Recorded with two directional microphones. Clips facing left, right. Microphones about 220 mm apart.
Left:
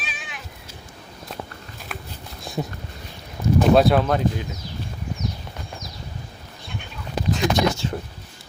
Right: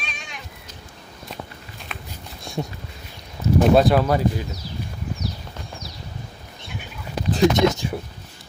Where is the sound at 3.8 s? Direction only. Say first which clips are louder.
Even; centre (ahead or behind).